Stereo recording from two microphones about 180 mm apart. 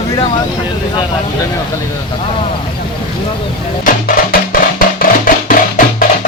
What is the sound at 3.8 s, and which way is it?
Music, 55° left (ahead or behind).